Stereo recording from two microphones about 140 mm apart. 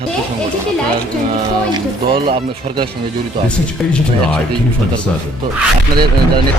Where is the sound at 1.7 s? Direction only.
35° right (ahead or behind).